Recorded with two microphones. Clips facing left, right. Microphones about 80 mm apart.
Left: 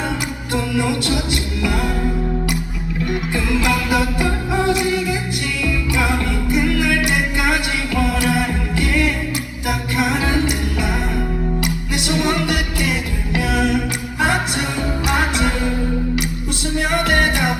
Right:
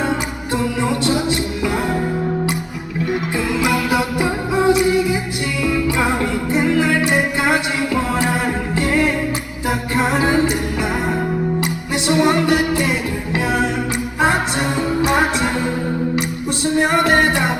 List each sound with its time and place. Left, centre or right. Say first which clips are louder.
0.5 s music: right 1 dB; right
3.3 s music: even; centre
11.9 s music: right 5 dB; right
16.6 s music: right 4 dB; right